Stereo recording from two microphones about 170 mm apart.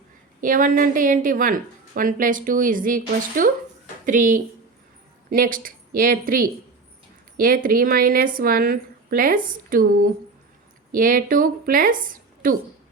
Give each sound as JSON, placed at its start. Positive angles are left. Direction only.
{"t": 0.4, "sound": "a woman's voice", "side_deg": -50}